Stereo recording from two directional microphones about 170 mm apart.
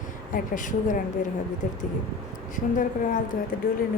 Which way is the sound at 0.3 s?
50° left (ahead or behind).